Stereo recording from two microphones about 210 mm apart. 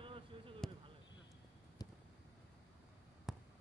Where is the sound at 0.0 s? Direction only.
25° right (ahead or behind).